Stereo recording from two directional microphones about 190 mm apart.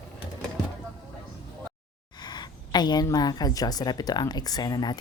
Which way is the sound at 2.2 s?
20° left (ahead or behind).